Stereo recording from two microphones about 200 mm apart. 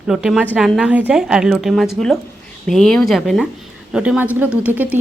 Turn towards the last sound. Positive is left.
turn(degrees=-10)  # may be behind; listen again after turning